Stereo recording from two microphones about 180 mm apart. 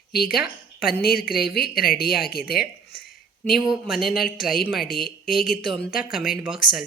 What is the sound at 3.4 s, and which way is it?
Speech, centre (ahead or behind).